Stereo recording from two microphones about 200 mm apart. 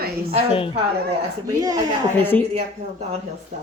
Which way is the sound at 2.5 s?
35° right (ahead or behind).